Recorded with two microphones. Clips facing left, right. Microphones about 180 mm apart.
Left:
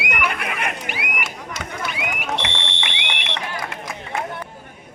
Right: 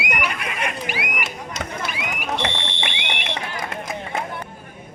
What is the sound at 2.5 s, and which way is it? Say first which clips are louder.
Fire alarm: right 1 dB; 75° left (ahead or behind).